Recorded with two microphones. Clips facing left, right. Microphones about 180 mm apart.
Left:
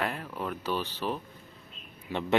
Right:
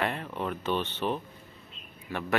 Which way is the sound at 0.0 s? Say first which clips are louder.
Right 2 dB; centre (ahead or behind).